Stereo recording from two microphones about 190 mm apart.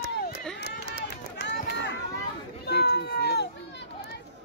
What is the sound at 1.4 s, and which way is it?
Run, 65° left (ahead or behind).